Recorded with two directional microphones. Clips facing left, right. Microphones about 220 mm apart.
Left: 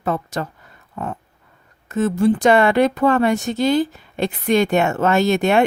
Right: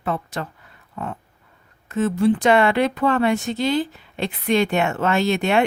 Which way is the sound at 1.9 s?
45° left (ahead or behind).